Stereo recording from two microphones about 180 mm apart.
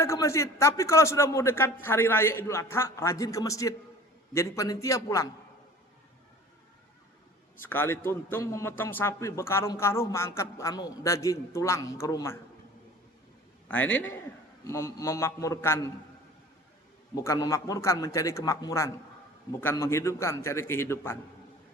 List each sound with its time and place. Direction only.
0.0 s a man's voice: 15° left (ahead or behind)
7.6 s a man's voice: 10° left (ahead or behind)
13.7 s a man's voice: 10° left (ahead or behind)
17.2 s a man's voice: 20° left (ahead or behind)